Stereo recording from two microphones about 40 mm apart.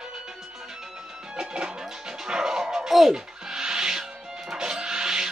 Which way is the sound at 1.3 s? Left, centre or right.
Right.